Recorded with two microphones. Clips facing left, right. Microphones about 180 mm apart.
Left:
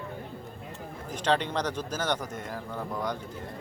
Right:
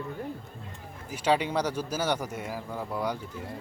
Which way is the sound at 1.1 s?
10° right (ahead or behind).